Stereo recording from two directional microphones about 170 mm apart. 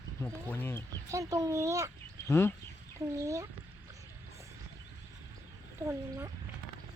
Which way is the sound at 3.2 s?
20° right (ahead or behind).